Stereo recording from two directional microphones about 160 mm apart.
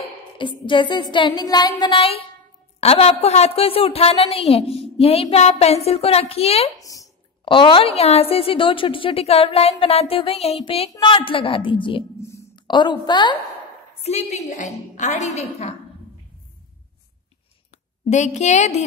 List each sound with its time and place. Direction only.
0.4 s music: 30° left (ahead or behind)
2.8 s a woman's voice: 40° left (ahead or behind)
6.8 s a woman's voice: 20° left (ahead or behind)
12.2 s a sound: 15° left (ahead or behind)
12.5 s a woman's voice: 30° left (ahead or behind)
13.9 s a woman's voice: 40° left (ahead or behind)
18.1 s a woman's voice: 50° left (ahead or behind)